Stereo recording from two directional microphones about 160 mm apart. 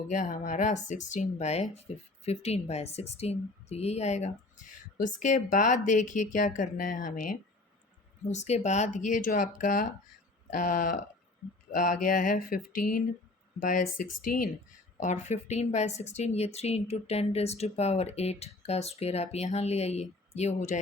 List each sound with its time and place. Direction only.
0.1 s speech: 50° left (ahead or behind)
8.2 s speech: 45° left (ahead or behind)
10.5 s a sound: 55° left (ahead or behind)
14.9 s speech: 45° left (ahead or behind)